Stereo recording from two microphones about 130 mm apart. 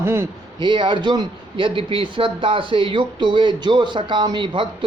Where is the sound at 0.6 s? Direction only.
35° right (ahead or behind).